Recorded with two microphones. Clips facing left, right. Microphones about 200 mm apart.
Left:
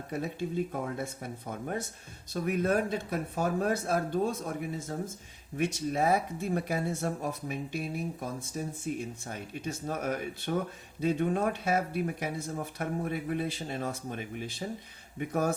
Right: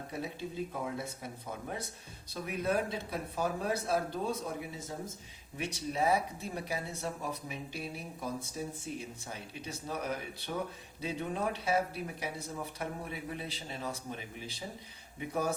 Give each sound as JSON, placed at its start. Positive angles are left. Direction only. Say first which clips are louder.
{"t": 0.1, "sound": "speech", "louder": "left 7 dB", "side_deg": 50}
{"t": 15.3, "sound": "speech", "louder": "left 4 dB", "side_deg": 50}